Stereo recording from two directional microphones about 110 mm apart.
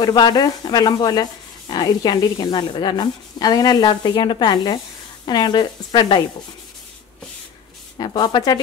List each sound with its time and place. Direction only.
0.0 s a woman's voice: 40° left (ahead or behind)
8.0 s a woman's voice: 45° left (ahead or behind)